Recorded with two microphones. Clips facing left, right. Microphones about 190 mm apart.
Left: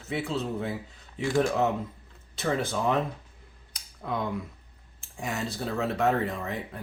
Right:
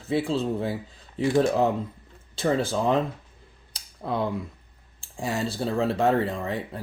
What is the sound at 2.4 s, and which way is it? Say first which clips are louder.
Speech: right 4 dB; 30° right (ahead or behind).